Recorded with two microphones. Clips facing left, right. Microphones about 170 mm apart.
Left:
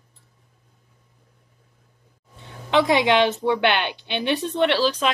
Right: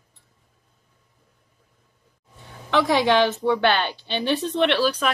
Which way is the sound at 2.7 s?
20° left (ahead or behind).